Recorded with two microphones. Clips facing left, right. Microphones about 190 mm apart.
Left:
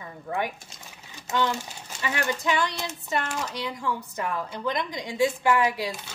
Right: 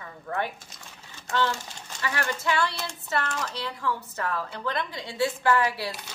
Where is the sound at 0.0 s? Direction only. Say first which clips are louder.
Left 1 dB; 15° left (ahead or behind).